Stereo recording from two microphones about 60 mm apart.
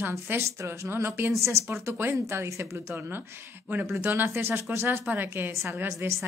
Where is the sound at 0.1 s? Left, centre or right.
Right.